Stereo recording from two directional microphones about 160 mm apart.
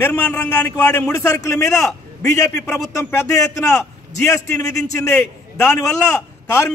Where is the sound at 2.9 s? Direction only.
20° left (ahead or behind).